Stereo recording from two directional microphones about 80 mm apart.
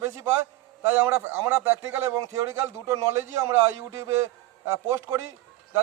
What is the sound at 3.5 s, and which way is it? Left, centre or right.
Speech, right.